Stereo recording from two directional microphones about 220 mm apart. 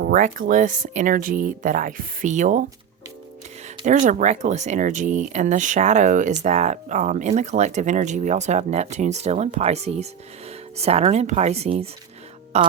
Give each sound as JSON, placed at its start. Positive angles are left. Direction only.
{"t": 0.0, "sound": "speech", "side_deg": -40}
{"t": 3.8, "sound": "speech", "side_deg": -35}